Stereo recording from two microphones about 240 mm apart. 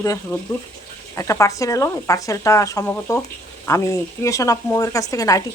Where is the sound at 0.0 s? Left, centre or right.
Centre.